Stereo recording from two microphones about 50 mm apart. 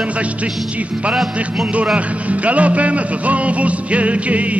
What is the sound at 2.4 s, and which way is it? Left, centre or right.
Music, right.